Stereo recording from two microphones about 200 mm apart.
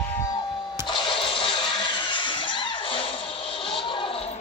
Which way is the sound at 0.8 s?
25° left (ahead or behind).